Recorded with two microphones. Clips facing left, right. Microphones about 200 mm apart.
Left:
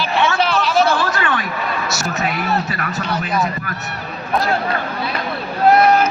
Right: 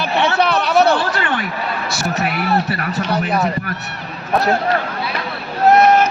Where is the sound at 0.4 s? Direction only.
60° right (ahead or behind).